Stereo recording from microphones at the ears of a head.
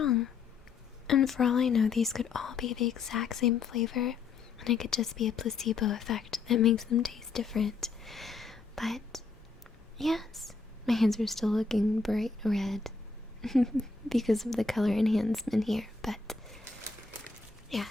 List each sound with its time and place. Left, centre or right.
1.0 s speech: left
7.8 s whispering: centre
10.0 s a woman's voice: centre